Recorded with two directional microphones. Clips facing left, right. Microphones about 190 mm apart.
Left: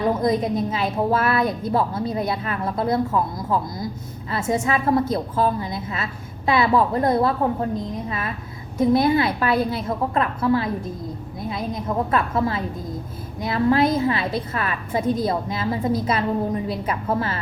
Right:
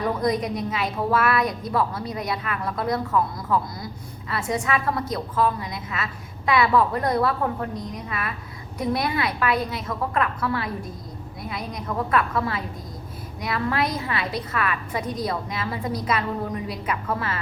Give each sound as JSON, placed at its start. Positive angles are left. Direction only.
{"t": 0.0, "sound": "a woman's voice", "side_deg": 25}